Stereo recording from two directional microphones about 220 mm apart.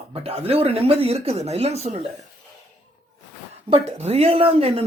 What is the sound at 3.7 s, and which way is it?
Speech, 25° right (ahead or behind).